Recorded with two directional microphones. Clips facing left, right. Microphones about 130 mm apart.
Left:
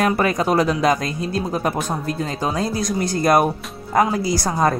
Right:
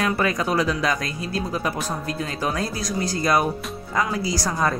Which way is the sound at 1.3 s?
40° left (ahead or behind).